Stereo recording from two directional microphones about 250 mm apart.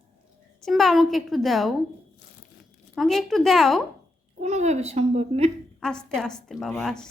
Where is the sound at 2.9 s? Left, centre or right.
Centre.